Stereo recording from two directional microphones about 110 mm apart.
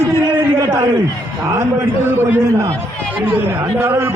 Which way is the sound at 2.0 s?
20° right (ahead or behind).